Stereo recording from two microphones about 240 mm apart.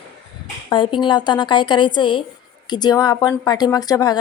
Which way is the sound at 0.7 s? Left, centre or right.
Centre.